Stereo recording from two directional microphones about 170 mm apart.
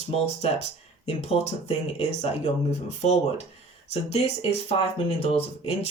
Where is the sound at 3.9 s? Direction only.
35° left (ahead or behind).